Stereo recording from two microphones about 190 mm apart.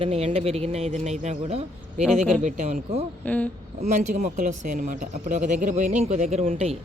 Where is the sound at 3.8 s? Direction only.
40° right (ahead or behind).